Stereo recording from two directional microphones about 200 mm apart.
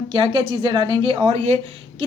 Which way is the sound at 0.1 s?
25° right (ahead or behind).